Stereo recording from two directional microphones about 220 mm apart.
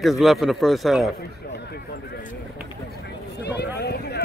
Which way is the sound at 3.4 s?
50° left (ahead or behind).